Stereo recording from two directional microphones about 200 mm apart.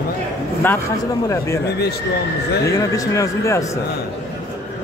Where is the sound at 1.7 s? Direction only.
55° left (ahead or behind).